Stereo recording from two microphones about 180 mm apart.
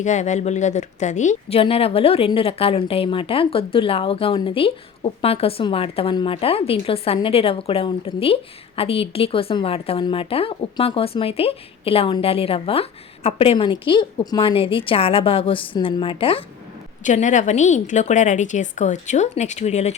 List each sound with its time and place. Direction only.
0.0 s speech: 40° left (ahead or behind)
17.0 s speech: 45° left (ahead or behind)